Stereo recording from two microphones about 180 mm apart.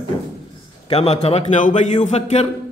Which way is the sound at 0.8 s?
35° left (ahead or behind).